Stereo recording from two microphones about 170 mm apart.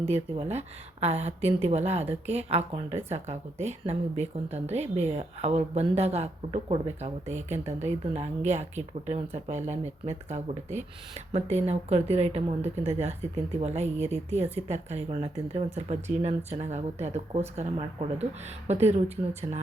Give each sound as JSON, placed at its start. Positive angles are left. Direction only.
{"t": 0.0, "sound": "a woman's voice", "side_deg": -40}